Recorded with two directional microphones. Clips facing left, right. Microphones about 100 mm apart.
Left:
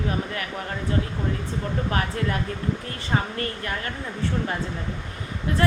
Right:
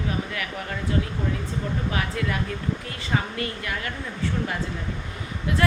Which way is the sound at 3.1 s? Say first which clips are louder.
Left 1 dB; 40° left (ahead or behind).